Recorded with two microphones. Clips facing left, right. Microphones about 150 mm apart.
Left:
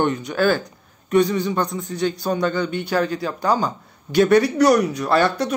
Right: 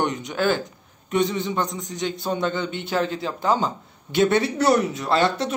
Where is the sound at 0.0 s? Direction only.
20° right (ahead or behind).